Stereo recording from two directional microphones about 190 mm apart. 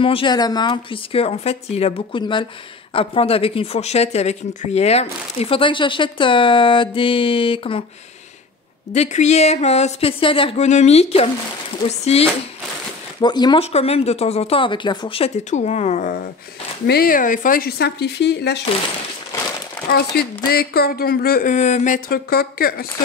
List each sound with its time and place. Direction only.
0.0 s speech: 25° left (ahead or behind)
8.9 s speech: 35° left (ahead or behind)
13.2 s speech: 20° left (ahead or behind); by 16.3 s 45° left (ahead or behind)
16.8 s speech: 55° left (ahead or behind)
20.4 s speech: 55° left (ahead or behind)